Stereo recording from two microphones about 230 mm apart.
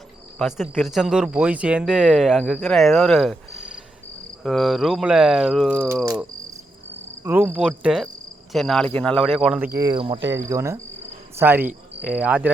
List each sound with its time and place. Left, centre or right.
0.3 s speech: centre
7.3 s speech: centre
9.7 s speech: centre